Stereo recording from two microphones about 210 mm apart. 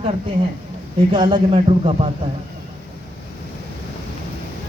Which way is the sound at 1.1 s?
25° right (ahead or behind).